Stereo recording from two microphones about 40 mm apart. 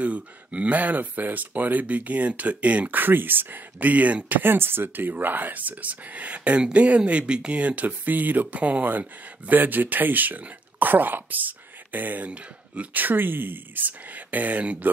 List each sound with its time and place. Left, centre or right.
0.0 s speech: right
3.0 s speech: right
3.9 s speech: right
4.3 s speech: right
8.5 s speech: right
9.5 s speech: right